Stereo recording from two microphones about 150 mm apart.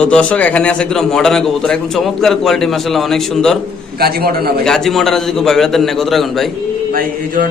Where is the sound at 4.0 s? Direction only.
90° right.